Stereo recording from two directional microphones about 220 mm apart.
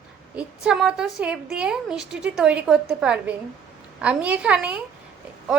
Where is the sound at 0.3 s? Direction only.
5° right (ahead or behind).